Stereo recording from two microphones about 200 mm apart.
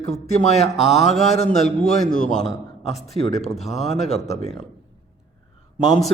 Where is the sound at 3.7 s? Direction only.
35° left (ahead or behind).